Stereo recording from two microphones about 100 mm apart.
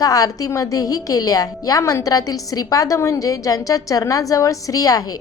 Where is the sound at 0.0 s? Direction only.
40° left (ahead or behind).